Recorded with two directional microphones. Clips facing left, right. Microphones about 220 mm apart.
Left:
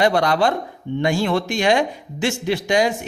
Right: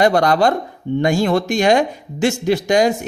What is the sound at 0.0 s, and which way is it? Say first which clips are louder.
Speech: right 3 dB; 45° right (ahead or behind).